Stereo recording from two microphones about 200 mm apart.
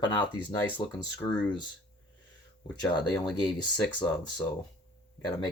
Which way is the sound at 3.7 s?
5° left (ahead or behind).